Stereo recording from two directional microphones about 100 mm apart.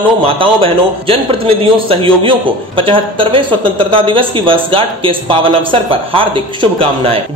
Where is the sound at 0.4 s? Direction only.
65° right (ahead or behind).